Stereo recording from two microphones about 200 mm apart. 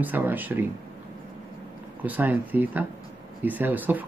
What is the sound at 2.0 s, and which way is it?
Speech, 10° right (ahead or behind).